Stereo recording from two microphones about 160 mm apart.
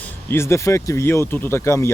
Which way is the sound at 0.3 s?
15° left (ahead or behind).